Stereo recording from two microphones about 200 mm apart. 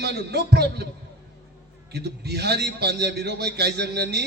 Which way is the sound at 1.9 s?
55° right (ahead or behind).